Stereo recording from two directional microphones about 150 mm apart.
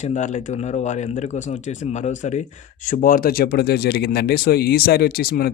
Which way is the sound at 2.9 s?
70° left (ahead or behind).